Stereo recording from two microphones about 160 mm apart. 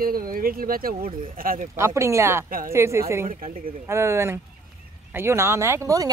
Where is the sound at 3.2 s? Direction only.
60° right (ahead or behind).